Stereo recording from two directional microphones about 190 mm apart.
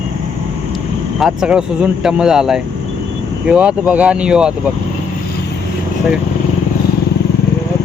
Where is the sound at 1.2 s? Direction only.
5° right (ahead or behind).